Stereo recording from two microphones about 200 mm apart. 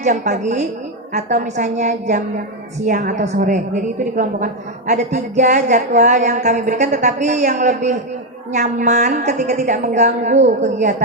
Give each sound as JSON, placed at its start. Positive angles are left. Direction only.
{"t": 0.0, "sound": "speech", "side_deg": -40}